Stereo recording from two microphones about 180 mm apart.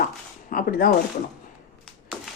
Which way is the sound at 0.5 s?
55° left (ahead or behind).